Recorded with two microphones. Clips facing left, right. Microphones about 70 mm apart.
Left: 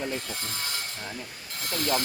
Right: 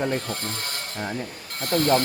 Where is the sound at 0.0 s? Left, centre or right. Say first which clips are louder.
Right 6 dB; right.